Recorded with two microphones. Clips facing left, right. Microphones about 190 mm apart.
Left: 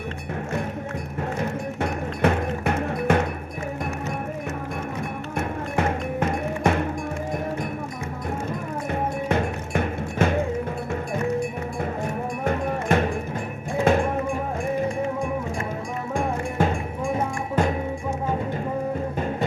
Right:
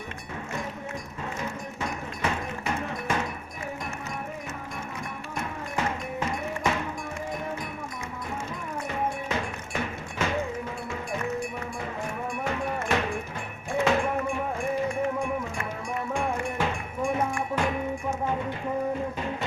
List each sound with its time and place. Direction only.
1.8 s music: 60° left (ahead or behind)
5.4 s music: 55° left (ahead or behind)
8.9 s music: 55° left (ahead or behind)
12.5 s music: 50° left (ahead or behind)
16.1 s music: 45° left (ahead or behind)